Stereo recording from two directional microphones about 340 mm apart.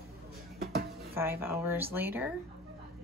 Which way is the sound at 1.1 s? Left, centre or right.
Centre.